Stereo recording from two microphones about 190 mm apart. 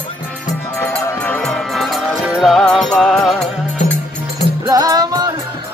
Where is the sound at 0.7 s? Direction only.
15° left (ahead or behind).